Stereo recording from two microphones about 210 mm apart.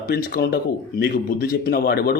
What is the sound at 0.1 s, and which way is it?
Speech, 45° left (ahead or behind).